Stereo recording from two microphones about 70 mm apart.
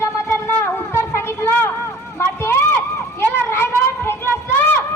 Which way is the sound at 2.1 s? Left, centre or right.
Left.